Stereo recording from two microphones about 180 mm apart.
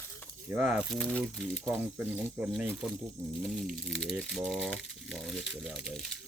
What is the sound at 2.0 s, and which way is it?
Speech, 10° right (ahead or behind).